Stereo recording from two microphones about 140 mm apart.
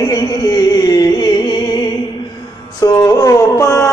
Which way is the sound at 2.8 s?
25° left (ahead or behind).